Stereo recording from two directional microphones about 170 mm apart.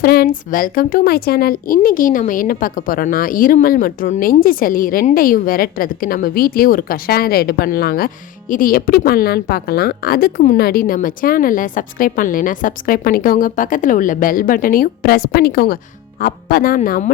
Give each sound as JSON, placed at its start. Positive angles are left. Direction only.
{"t": 0.0, "sound": "a woman's voice", "side_deg": 65}